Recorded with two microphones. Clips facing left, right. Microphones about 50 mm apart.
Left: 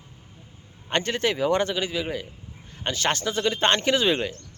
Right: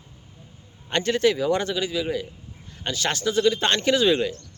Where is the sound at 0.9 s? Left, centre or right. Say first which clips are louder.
Right 3 dB; left.